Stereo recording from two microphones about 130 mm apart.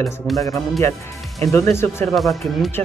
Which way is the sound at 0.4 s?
25° left (ahead or behind).